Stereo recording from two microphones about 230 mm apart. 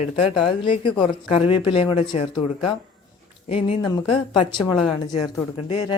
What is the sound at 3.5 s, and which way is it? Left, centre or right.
Speech, left.